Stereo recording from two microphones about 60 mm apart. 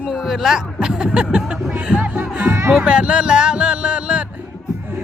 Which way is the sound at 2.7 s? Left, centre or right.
Right.